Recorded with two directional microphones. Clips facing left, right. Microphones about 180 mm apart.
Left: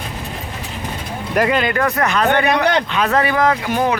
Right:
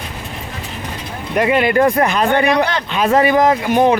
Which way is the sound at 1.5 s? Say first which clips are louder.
Right 5 dB; 25° right (ahead or behind).